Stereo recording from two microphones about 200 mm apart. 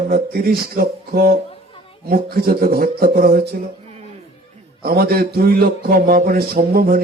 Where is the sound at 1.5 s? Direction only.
30° left (ahead or behind).